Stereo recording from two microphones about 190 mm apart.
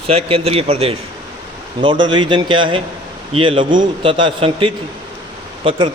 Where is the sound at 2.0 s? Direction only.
25° right (ahead or behind).